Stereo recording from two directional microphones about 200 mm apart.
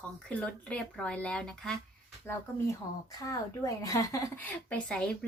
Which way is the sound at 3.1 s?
15° left (ahead or behind).